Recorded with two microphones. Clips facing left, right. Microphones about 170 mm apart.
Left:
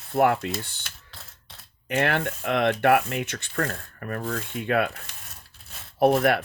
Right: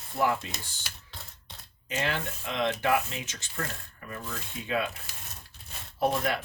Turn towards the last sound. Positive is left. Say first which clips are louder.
# left 8 dB
turn(degrees=65)  # may be behind; listen again after turning